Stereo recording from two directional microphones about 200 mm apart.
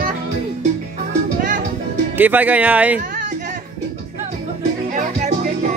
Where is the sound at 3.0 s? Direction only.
40° right (ahead or behind).